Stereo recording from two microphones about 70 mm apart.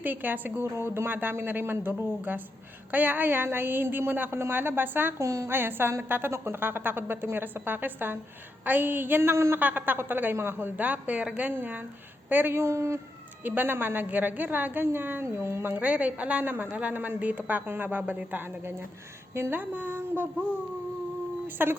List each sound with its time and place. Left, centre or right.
0.0 s a woman's voice: right
5.1 s a woman's voice: right
5.5 s a woman's voice: right
9.6 s a woman's voice: right
13.4 s a woman's voice: right
15.2 s a woman's voice: right
21.4 s speech: right